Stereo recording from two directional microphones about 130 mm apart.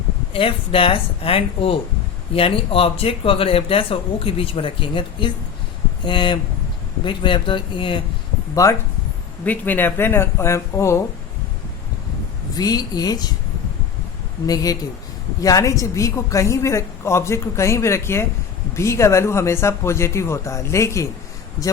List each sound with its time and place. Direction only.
0.3 s speech: 45° left (ahead or behind)
8.6 s a woman's voice: 25° left (ahead or behind)
9.4 s speech: 15° left (ahead or behind)
12.5 s a woman's voice: 30° left (ahead or behind)
14.4 s a woman's voice: 30° left (ahead or behind)